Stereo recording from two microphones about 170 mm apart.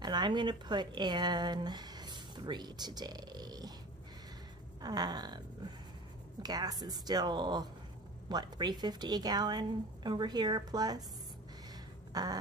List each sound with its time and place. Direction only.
0.0 s speech: 25° right (ahead or behind)
4.8 s speech: 25° right (ahead or behind)
12.1 s a sound: 20° right (ahead or behind)